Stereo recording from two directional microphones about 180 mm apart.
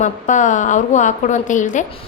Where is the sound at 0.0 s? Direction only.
45° left (ahead or behind).